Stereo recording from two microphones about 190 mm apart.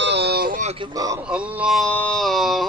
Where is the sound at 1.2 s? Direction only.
5° right (ahead or behind).